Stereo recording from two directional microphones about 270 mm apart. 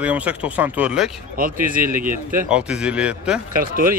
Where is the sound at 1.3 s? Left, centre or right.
Right.